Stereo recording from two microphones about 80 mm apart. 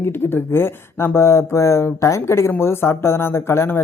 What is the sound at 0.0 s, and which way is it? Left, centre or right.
Speech, left.